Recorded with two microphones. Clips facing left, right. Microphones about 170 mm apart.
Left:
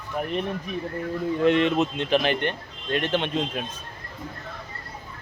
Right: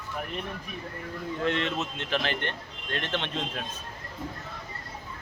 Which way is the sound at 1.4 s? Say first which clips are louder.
Left 9 dB; 15° left (ahead or behind).